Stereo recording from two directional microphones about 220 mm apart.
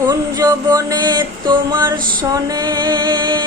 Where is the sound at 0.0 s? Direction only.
15° right (ahead or behind).